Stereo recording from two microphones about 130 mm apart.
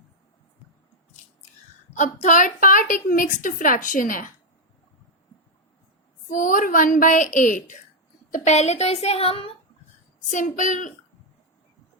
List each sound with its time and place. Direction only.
2.0 s a woman's voice: 75° left (ahead or behind); by 4.3 s 90° left
6.2 s a woman's voice: 90° left
8.3 s a woman's voice: 60° left (ahead or behind)
10.3 s a woman's voice: 75° left (ahead or behind)